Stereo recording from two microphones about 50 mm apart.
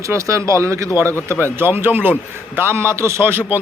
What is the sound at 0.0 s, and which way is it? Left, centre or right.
Speech, right.